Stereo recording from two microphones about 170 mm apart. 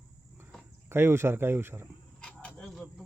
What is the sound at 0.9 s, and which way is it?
Speech, 15° right (ahead or behind).